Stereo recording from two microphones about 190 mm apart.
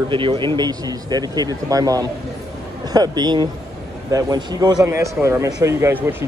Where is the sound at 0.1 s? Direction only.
25° right (ahead or behind).